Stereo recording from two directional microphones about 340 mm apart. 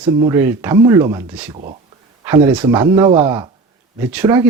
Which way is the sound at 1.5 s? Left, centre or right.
Centre.